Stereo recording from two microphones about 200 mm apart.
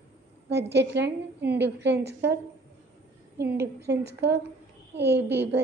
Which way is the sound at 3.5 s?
55° right (ahead or behind).